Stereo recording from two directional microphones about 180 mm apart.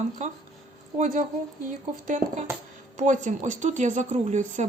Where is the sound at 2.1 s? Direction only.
45° right (ahead or behind).